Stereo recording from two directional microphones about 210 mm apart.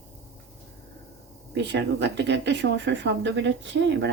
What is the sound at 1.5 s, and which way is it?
Speech, 55° right (ahead or behind).